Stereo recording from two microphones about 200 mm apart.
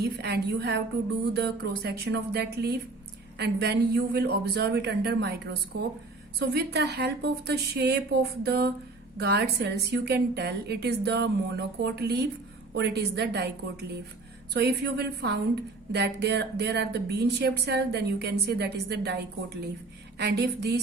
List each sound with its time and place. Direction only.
0.0 s speech: 55° right (ahead or behind)